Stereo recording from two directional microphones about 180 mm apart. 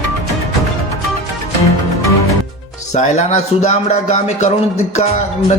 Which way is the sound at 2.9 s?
40° left (ahead or behind).